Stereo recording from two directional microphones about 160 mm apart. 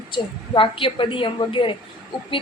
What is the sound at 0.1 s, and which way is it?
Speech, 30° left (ahead or behind).